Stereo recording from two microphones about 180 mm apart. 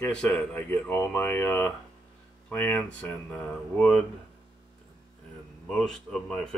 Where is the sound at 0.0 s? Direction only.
5° left (ahead or behind).